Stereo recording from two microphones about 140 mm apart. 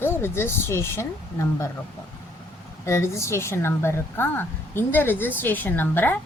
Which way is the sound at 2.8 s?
20° left (ahead or behind).